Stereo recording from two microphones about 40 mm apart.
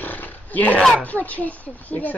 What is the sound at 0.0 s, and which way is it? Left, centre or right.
Roar, left.